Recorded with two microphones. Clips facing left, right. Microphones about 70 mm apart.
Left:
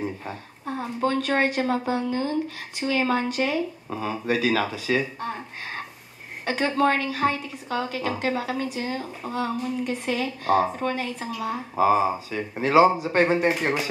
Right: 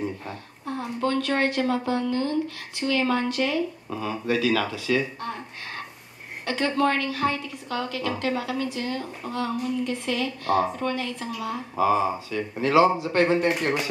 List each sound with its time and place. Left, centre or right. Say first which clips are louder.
0.0 s a sound: even; centre
1.0 s speech: left 1 dB; centre
11.2 s speech: left 1 dB; centre